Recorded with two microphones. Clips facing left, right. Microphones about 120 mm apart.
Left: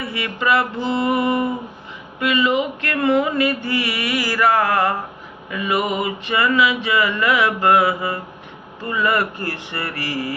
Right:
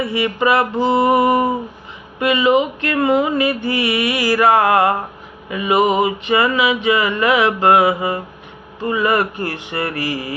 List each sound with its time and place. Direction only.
0.1 s mantra: 20° right (ahead or behind)